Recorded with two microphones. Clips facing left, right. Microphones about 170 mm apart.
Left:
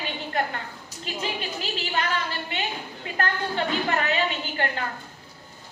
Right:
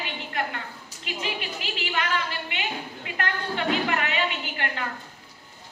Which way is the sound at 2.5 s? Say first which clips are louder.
Left 1 dB; 35° left (ahead or behind).